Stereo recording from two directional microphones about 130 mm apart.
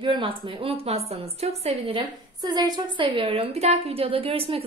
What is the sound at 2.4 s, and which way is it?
A woman's voice, 35° right (ahead or behind).